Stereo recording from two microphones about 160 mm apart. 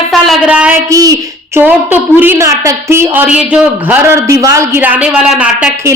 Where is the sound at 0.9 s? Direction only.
25° right (ahead or behind).